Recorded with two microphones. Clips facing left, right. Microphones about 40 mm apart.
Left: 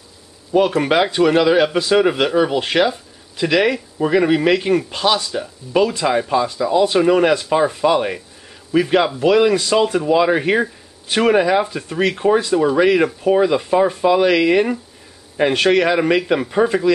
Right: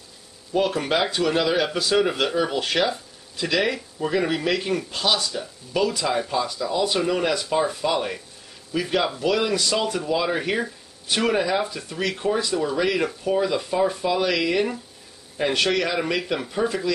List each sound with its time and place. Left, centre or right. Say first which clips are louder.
0.6 s speech: left 7 dB; left